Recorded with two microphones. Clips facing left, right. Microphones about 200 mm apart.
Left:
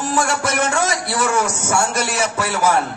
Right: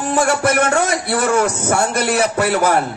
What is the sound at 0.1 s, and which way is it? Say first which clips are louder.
A man's voice: right 6 dB; 60° right (ahead or behind).